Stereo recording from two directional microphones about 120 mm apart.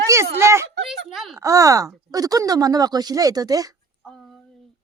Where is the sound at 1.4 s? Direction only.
30° right (ahead or behind).